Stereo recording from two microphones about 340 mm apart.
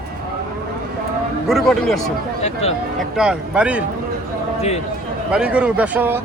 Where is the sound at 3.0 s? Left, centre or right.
Centre.